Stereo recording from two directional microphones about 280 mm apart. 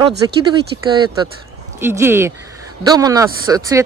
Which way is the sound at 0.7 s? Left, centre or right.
Centre.